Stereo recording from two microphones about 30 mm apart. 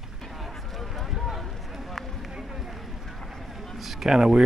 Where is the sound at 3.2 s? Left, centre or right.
Centre.